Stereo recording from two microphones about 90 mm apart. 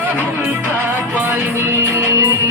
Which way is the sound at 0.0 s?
20° right (ahead or behind).